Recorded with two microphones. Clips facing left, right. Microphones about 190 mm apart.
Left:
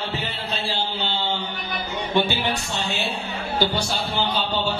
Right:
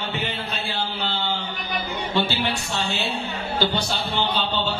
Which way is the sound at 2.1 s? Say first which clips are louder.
Left 2 dB; 20° left (ahead or behind).